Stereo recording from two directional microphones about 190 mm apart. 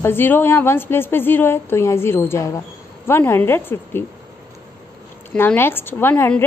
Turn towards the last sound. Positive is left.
turn(degrees=10)  # may be behind; listen again after turning